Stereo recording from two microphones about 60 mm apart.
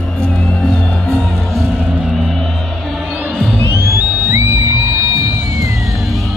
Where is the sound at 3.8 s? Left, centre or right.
Right.